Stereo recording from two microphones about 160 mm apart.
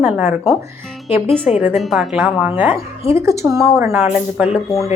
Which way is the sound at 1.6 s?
5° right (ahead or behind).